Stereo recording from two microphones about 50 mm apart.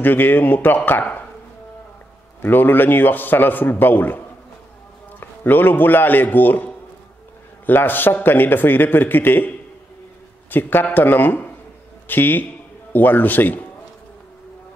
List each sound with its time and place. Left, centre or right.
0.0 s a man's voice: left
2.4 s a man's voice: left
5.2 s a man's voice: left
10.5 s a man's voice: left